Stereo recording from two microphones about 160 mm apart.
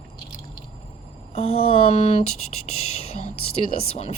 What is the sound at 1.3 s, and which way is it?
Speech, 35° left (ahead or behind).